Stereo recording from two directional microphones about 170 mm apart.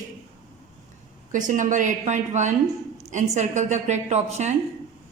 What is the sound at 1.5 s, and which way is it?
A woman's voice, 50° right (ahead or behind).